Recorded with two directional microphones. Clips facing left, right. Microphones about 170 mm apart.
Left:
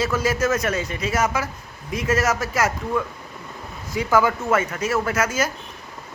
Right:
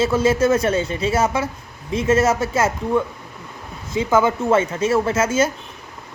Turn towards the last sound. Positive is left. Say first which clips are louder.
# right 4 dB
turn(degrees=-25)  # may be behind; listen again after turning